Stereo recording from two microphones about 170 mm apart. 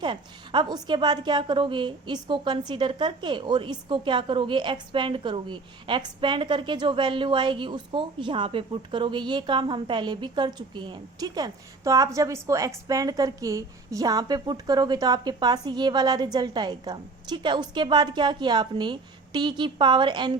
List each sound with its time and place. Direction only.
0.0 s a woman's voice: 30° right (ahead or behind)